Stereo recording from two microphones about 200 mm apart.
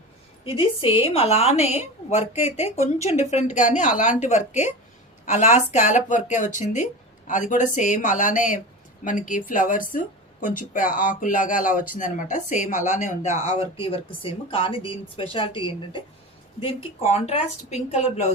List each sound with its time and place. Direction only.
0.4 s a woman's voice: 25° left (ahead or behind)